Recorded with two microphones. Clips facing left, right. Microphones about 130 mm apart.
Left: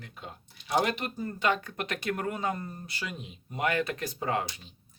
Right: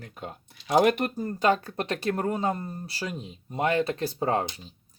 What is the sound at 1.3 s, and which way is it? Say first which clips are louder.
Speech: right 4 dB; 35° right (ahead or behind).